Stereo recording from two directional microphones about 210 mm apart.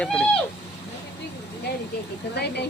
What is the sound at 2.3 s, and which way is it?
Speech, 50° left (ahead or behind).